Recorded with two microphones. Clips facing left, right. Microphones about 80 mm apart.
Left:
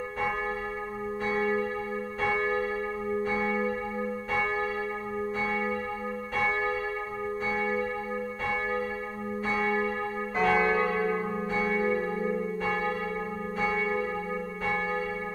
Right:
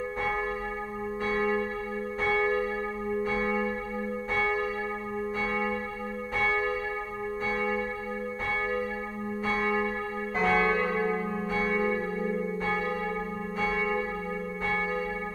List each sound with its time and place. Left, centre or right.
1.3 s church bell: centre
2.3 s church bell: centre
9.6 s church bell: centre
10.4 s change ringing: centre
11.1 s church bell: centre